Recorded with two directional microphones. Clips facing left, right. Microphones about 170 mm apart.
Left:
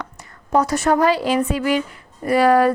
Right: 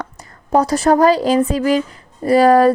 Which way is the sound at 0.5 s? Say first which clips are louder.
Right 4 dB; 35° right (ahead or behind).